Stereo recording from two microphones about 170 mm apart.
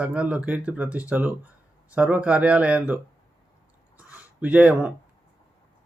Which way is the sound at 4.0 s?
10° right (ahead or behind).